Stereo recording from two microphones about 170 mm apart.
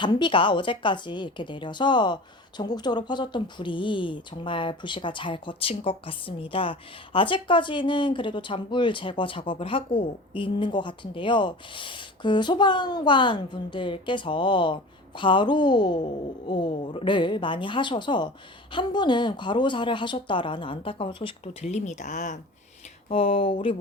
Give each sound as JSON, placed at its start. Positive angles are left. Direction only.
{"t": 0.0, "sound": "speech", "side_deg": 25}
{"t": 23.0, "sound": "speech", "side_deg": 35}